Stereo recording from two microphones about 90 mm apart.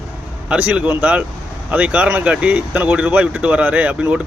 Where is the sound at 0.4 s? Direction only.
15° right (ahead or behind).